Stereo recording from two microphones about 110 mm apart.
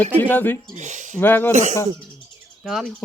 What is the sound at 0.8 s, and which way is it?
Speech, 90° right.